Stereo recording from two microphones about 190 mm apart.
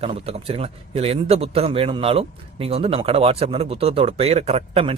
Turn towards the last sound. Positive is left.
turn(degrees=-30)  # may be behind; listen again after turning